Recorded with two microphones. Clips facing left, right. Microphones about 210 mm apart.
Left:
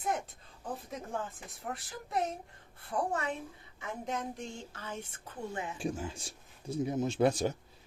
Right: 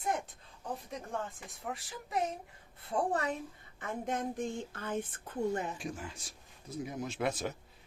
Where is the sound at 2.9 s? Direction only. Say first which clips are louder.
Right 1 dB; 35° right (ahead or behind).